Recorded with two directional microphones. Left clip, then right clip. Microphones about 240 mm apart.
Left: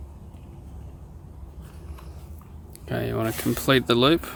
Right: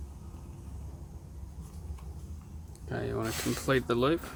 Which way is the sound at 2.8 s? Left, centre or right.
Left.